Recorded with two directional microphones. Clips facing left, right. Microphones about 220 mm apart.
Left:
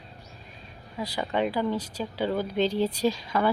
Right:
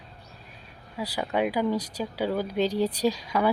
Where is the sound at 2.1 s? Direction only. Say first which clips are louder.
Even; 10° right (ahead or behind).